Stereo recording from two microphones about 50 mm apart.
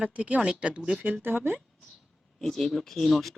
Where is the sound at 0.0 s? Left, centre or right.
Right.